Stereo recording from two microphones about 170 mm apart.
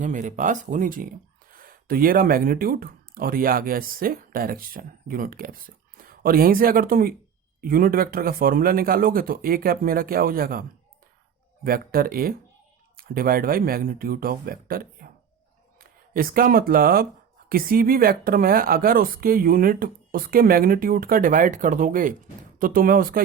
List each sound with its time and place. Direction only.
0.0 s speech: 50° right (ahead or behind)